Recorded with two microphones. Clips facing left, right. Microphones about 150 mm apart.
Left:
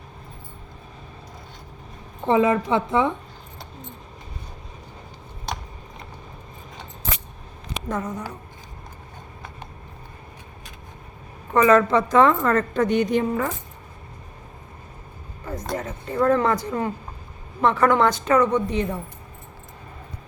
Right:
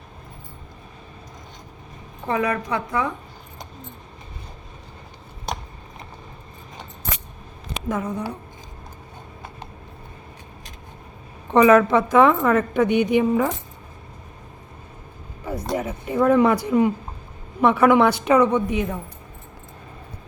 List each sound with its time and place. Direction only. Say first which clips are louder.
2.2 s a woman's voice: left 5 dB; 25° left (ahead or behind)
7.9 s a woman's voice: right 2 dB; 5° right (ahead or behind)
11.5 s a woman's voice: right 2 dB; 15° right (ahead or behind)
15.4 s a woman's voice: right 3 dB; 10° right (ahead or behind)